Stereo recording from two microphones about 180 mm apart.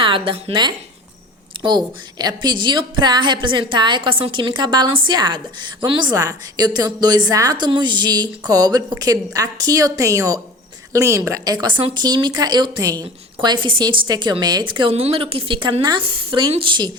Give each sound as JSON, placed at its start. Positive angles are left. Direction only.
{"t": 0.0, "sound": "a woman's voice", "side_deg": -30}